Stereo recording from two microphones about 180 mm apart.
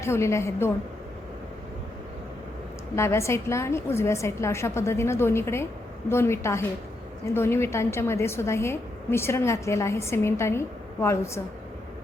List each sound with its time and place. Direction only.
0.0 s a woman's voice: 15° left (ahead or behind)
2.9 s a woman's voice: 15° left (ahead or behind)